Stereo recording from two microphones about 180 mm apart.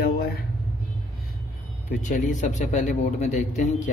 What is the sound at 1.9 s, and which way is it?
A man's voice, 45° left (ahead or behind).